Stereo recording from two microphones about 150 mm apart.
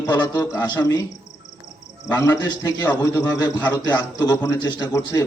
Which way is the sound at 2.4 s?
25° left (ahead or behind).